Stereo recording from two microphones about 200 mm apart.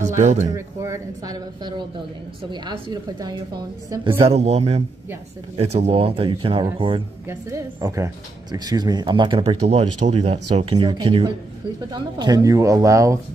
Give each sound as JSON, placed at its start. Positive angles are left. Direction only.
{"t": 0.0, "sound": "speech", "side_deg": -35}
{"t": 0.5, "sound": "speech", "side_deg": -15}
{"t": 4.3, "sound": "a man's voice", "side_deg": -30}
{"t": 7.2, "sound": "speech", "side_deg": -15}